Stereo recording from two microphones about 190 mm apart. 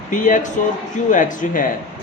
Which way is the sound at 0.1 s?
40° left (ahead or behind).